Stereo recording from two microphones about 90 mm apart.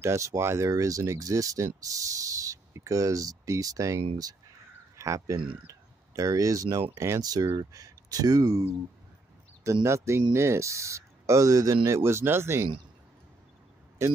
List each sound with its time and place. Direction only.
0.0 s speech: 35° right (ahead or behind)
7.2 s speech: 45° right (ahead or behind)
9.8 s speech: 30° right (ahead or behind)